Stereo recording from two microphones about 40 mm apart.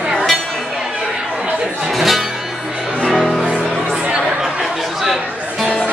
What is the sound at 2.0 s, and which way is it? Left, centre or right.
Music, centre.